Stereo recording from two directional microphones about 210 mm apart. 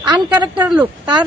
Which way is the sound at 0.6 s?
5° right (ahead or behind).